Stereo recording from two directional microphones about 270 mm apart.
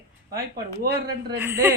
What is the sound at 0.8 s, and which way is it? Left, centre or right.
Speech, right.